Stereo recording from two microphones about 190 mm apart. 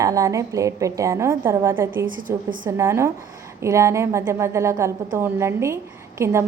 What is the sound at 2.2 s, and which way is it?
Speech, 45° right (ahead or behind).